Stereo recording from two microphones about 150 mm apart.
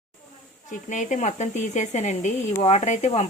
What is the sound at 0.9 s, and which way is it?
Speech, 55° left (ahead or behind).